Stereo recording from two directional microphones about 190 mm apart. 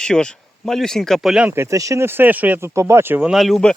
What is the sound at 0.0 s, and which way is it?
Speech, 5° left (ahead or behind).